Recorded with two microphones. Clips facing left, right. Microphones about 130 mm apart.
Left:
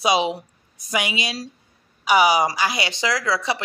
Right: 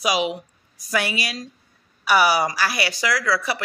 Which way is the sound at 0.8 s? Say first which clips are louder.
Right 1 dB; 15° left (ahead or behind).